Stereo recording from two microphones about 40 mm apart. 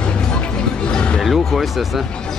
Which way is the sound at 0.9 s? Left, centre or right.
Left.